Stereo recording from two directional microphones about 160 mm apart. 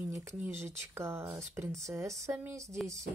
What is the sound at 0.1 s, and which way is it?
Speech, 15° right (ahead or behind).